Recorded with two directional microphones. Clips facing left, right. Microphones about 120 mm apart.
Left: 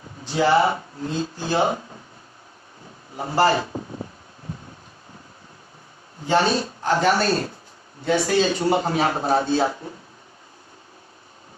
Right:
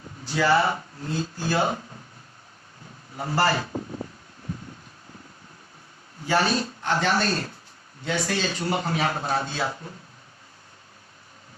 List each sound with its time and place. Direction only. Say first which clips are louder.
0.3 s speech: left 3 dB; 25° left (ahead or behind)
3.2 s speech: left 4 dB; 20° left (ahead or behind)
6.2 s speech: left 3 dB; 30° left (ahead or behind)
7.3 s speech: left 5 dB; 30° left (ahead or behind)